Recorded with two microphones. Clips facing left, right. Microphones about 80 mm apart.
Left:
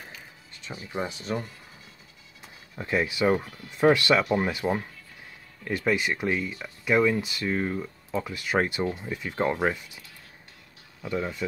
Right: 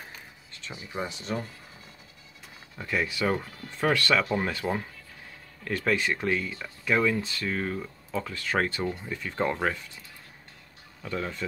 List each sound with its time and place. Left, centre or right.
0.9 s speech: centre
2.8 s speech: left
11.0 s speech: centre